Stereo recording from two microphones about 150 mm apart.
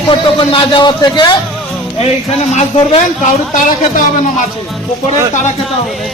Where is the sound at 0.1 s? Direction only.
35° left (ahead or behind).